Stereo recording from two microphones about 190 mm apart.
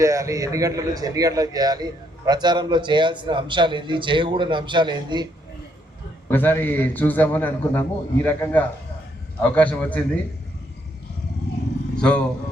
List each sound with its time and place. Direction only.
0.0 s a man's voice: 15° right (ahead or behind)
6.3 s a man's voice: 10° left (ahead or behind)
11.9 s a man's voice: 5° left (ahead or behind)